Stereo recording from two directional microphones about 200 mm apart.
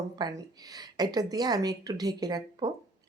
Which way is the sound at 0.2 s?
20° right (ahead or behind).